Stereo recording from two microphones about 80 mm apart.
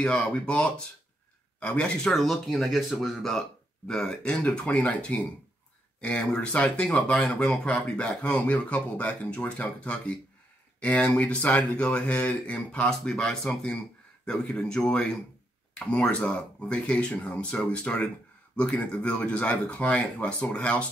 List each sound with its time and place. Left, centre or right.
0.0 s speech: centre
2.1 s speech: centre